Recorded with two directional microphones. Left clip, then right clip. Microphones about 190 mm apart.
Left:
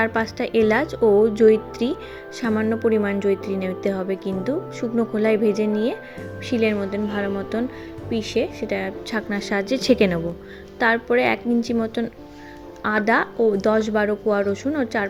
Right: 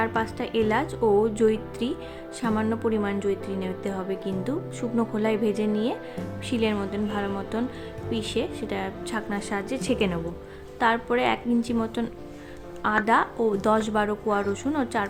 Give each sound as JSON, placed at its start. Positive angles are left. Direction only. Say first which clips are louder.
{"t": 0.0, "sound": "a woman's voice", "louder": "left 4 dB", "side_deg": 20}
{"t": 10.8, "sound": "speech", "louder": "left 4 dB", "side_deg": 15}